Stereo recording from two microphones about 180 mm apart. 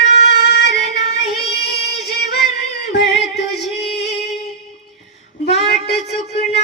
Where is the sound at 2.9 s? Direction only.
70° left (ahead or behind).